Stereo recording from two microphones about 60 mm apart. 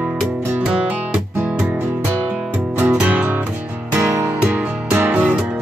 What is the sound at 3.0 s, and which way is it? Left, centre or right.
Music, right.